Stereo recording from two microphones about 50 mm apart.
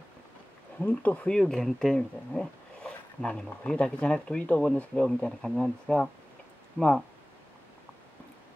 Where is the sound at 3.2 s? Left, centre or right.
Left.